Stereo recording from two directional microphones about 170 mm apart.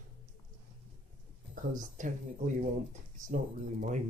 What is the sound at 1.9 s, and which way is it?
Speech, 50° right (ahead or behind).